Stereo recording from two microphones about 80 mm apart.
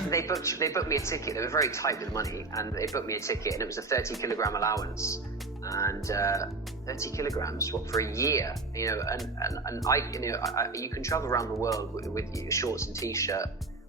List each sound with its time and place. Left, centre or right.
0.1 s speech: left